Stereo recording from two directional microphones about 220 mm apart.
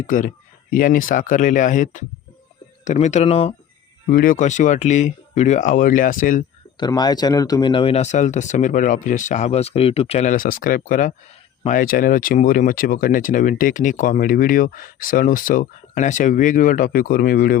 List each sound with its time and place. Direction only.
0.7 s speech: 40° left (ahead or behind)
4.1 s speech: 40° left (ahead or behind)
6.7 s speech: 20° left (ahead or behind); by 17.6 s 40° left (ahead or behind)